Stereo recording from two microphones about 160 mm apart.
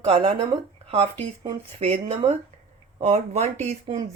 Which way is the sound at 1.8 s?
40° right (ahead or behind).